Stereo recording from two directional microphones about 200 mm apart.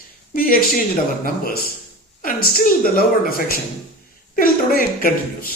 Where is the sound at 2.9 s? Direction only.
45° left (ahead or behind).